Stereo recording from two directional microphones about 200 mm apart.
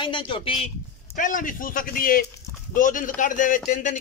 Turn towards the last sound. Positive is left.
turn(degrees=40)  # may be behind; listen again after turning